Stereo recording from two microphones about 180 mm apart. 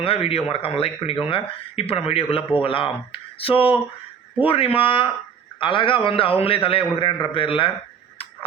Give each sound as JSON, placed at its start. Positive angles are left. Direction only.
{"t": 0.0, "sound": "a man's voice", "side_deg": 30}